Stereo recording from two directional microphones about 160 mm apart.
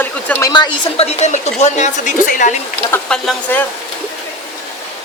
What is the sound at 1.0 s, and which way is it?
A woman's voice, 40° left (ahead or behind).